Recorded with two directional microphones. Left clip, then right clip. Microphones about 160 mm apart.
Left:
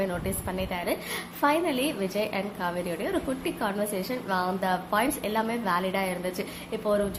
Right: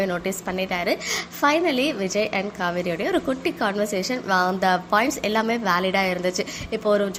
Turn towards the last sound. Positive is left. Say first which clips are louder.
# right 5 dB
turn(degrees=-20)  # may be behind; listen again after turning